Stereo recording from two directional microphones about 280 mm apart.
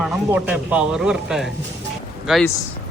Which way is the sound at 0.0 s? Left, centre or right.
Centre.